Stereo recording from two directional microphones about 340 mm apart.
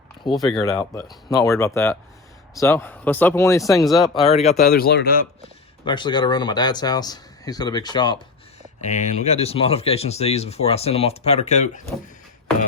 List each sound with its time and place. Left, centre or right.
0.5 s speech: centre
4.3 s speech: centre
5.8 s speech: centre